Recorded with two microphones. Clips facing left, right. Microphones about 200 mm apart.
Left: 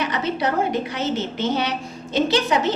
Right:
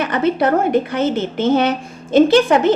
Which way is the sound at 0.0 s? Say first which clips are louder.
Right 7 dB; 55° right (ahead or behind).